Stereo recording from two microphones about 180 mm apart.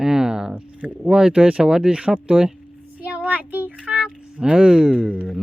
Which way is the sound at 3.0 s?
5° right (ahead or behind).